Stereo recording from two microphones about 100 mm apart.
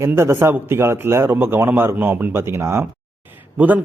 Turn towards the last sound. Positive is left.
turn(degrees=-15)  # may be behind; listen again after turning